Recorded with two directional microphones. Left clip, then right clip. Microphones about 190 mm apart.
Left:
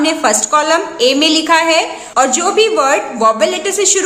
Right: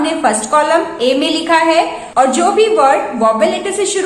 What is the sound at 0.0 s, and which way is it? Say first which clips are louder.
A woman's voice: left 1 dB; 30° left (ahead or behind).